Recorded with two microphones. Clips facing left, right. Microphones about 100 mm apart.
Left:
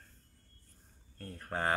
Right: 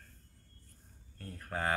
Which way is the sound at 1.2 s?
35° left (ahead or behind).